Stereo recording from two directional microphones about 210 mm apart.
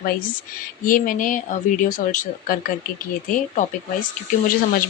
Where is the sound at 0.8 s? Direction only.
40° left (ahead or behind).